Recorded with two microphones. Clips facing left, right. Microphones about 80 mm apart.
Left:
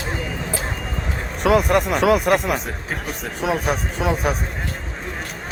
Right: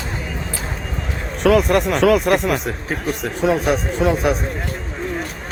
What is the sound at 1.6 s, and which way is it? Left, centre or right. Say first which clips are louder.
Speech: right 2 dB; centre.